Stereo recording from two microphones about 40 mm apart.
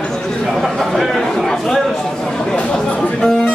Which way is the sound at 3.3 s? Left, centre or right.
Centre.